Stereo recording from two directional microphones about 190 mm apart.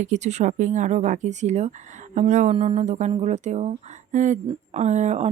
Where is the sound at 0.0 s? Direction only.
40° right (ahead or behind).